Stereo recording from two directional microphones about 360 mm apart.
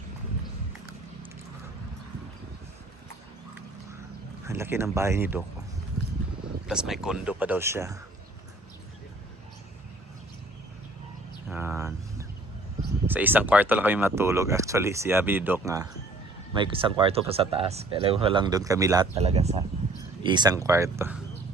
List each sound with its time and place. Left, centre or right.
4.4 s speech: centre
6.7 s speech: centre
11.4 s a sound: centre
13.1 s speech: centre